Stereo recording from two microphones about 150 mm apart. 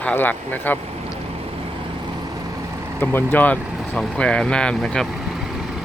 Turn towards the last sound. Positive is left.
turn(degrees=5)  # may be behind; listen again after turning